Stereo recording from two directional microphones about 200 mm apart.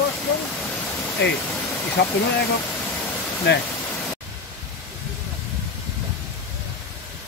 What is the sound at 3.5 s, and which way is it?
Speech, 60° left (ahead or behind).